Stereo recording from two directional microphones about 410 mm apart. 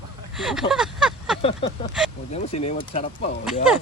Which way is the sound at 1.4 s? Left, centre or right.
Centre.